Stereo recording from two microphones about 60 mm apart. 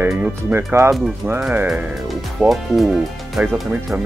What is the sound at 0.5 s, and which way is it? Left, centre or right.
Speech, right.